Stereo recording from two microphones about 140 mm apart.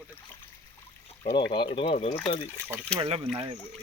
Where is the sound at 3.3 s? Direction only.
35° right (ahead or behind).